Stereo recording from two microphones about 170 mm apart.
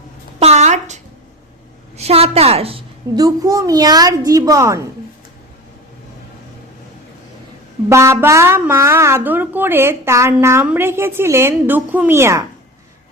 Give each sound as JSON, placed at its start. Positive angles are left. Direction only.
{"t": 0.3, "sound": "a sound", "side_deg": -40}
{"t": 2.0, "sound": "a woman's voice", "side_deg": -35}
{"t": 3.2, "sound": "a woman's voice", "side_deg": -20}
{"t": 7.9, "sound": "a woman's voice", "side_deg": -15}